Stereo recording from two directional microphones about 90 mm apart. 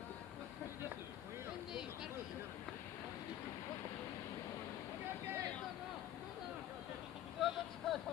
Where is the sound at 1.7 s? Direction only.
5° right (ahead or behind).